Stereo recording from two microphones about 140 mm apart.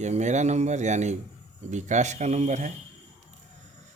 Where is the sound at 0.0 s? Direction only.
55° right (ahead or behind).